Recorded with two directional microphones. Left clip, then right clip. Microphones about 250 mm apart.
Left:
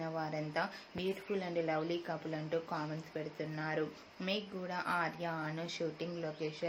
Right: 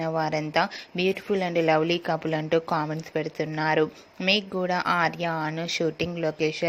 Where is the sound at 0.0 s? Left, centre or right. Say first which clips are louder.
Right 13 dB; right.